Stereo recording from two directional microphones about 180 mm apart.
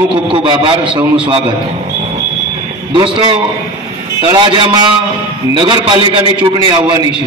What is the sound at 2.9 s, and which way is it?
A man's voice, 30° right (ahead or behind).